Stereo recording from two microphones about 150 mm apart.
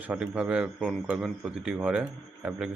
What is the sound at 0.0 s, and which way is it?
Speech, 10° right (ahead or behind).